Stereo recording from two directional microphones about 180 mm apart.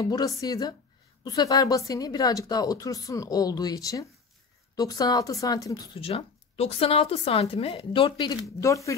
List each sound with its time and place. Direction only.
0.0 s speech: 20° left (ahead or behind)